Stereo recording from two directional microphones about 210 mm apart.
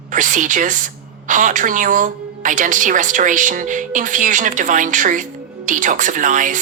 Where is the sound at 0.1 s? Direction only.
35° right (ahead or behind).